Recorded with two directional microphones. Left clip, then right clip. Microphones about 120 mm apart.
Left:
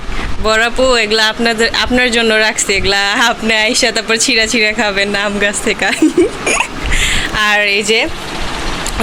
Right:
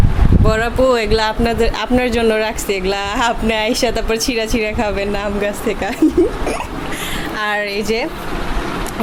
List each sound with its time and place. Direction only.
0.4 s speech: 5° right (ahead or behind)
0.8 s speech: 15° right (ahead or behind); by 6.0 s 5° left (ahead or behind)
6.4 s a sound: 15° left (ahead or behind)
6.9 s speech: centre (ahead or behind)